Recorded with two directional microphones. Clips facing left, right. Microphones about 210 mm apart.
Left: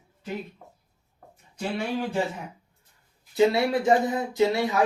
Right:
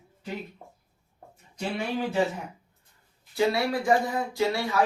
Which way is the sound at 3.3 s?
20° left (ahead or behind).